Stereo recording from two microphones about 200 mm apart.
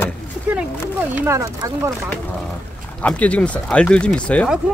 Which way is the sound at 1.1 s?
10° right (ahead or behind).